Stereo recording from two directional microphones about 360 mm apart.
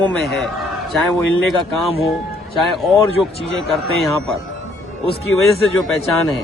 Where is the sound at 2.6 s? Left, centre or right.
Centre.